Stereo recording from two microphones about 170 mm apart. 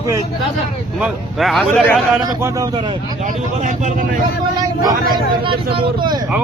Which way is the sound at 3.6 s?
45° right (ahead or behind).